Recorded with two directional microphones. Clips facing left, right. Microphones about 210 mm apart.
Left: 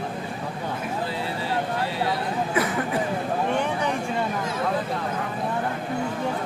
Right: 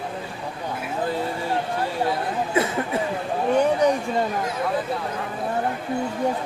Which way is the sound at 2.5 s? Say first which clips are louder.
Right 3 dB; 25° right (ahead or behind).